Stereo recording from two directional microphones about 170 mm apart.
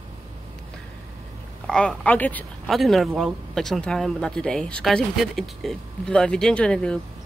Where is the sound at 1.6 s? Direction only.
5° left (ahead or behind).